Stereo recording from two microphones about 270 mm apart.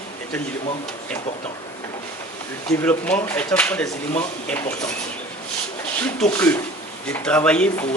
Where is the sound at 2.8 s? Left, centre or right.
Centre.